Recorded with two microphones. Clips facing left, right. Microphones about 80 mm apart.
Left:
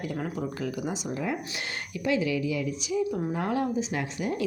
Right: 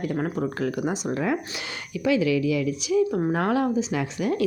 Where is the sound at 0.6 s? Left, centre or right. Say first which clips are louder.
Right 5 dB; right.